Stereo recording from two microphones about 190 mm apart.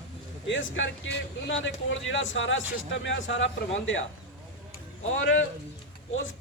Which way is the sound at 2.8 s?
75° left (ahead or behind).